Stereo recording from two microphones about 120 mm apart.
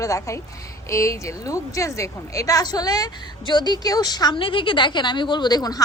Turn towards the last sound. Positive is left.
turn(degrees=35)  # may be behind; listen again after turning